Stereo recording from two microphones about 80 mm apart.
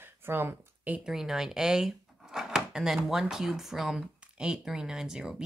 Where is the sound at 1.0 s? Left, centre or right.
Centre.